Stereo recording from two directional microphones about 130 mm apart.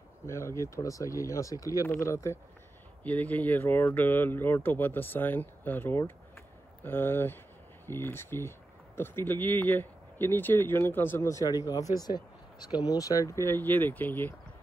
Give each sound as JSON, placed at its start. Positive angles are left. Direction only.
{"t": 0.3, "sound": "speech", "side_deg": 20}